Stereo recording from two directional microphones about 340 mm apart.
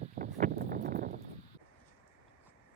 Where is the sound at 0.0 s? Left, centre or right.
Right.